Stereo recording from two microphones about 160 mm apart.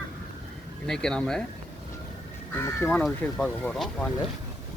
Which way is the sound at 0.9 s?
5° left (ahead or behind).